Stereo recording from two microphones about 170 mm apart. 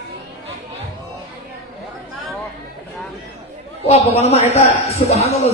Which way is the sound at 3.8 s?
40° left (ahead or behind).